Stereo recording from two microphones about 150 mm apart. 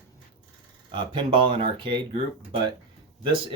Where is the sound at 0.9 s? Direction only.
35° right (ahead or behind).